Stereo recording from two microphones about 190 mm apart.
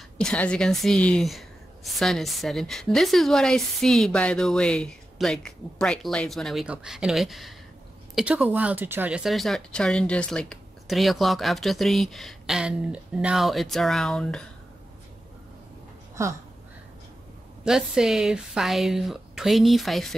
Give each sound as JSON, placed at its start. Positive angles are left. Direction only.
{"t": 0.2, "sound": "speech", "side_deg": 5}
{"t": 16.2, "sound": "speech", "side_deg": -15}
{"t": 17.6, "sound": "speech", "side_deg": -5}